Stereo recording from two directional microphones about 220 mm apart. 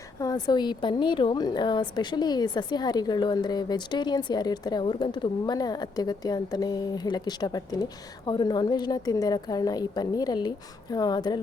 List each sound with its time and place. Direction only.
0.2 s a woman's voice: 15° left (ahead or behind)